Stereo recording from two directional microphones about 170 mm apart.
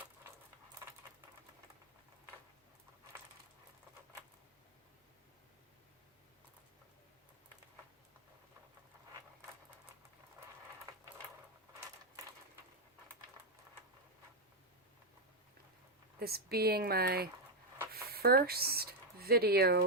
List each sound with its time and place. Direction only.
16.2 s speech: 65° right (ahead or behind)